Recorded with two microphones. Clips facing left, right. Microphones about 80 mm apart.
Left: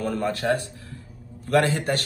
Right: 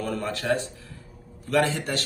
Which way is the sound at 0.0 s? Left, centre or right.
Left.